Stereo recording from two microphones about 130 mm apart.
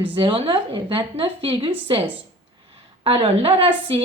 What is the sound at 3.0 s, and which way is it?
A woman's voice, 45° right (ahead or behind).